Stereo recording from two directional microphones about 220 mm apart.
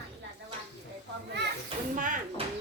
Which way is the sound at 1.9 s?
40° right (ahead or behind).